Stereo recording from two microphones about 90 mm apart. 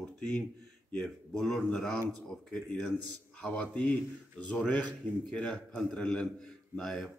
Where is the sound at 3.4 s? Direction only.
15° left (ahead or behind).